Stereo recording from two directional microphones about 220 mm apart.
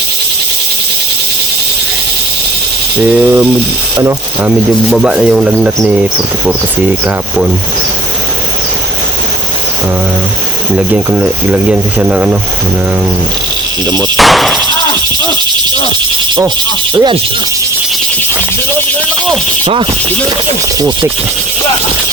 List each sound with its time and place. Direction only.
3.0 s speech: 5° right (ahead or behind)
10.8 s speech: 5° right (ahead or behind)
13.8 s speech: 20° right (ahead or behind)
14.2 s a sound: centre (ahead or behind)
16.9 s speech: 20° right (ahead or behind)
19.3 s speech: 20° right (ahead or behind)